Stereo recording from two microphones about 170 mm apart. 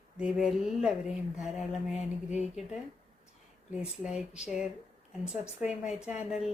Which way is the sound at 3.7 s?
5° right (ahead or behind).